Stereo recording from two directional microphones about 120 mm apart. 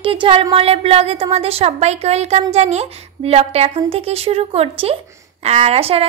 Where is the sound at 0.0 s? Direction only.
50° right (ahead or behind).